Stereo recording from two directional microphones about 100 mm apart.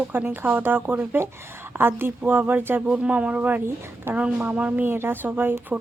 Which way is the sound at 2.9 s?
10° right (ahead or behind).